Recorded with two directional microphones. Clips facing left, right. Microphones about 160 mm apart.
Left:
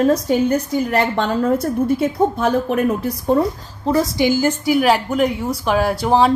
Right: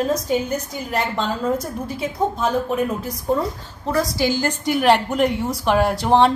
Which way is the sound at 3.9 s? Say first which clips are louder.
Left 4 dB; 20° left (ahead or behind).